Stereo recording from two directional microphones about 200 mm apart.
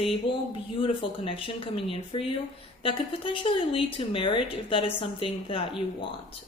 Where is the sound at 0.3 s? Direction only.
60° left (ahead or behind).